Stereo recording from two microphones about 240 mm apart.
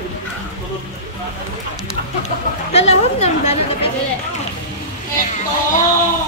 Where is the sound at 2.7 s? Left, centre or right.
Left.